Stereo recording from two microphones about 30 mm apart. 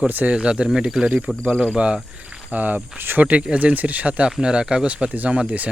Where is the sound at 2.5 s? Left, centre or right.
Right.